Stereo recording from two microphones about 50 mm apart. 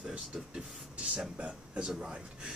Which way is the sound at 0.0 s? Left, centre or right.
Right.